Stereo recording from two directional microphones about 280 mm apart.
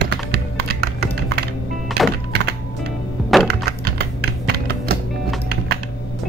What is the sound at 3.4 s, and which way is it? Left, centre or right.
Music, right.